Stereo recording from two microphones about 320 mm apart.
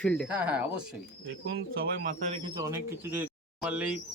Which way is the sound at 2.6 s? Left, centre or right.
Centre.